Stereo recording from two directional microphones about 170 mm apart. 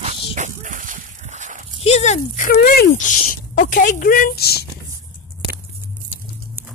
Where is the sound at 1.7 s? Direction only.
40° left (ahead or behind); by 4.6 s 70° left (ahead or behind).